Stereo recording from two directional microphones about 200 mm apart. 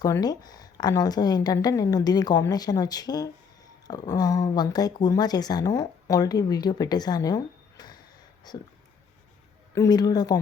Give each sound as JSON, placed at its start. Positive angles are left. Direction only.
{"t": 0.0, "sound": "a woman's voice", "side_deg": 20}
{"t": 9.7, "sound": "a woman's voice", "side_deg": 20}